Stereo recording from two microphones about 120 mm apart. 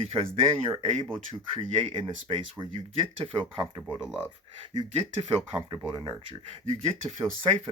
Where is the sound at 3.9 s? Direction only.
5° right (ahead or behind).